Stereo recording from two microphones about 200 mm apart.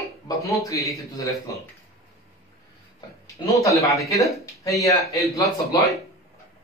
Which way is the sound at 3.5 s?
15° left (ahead or behind).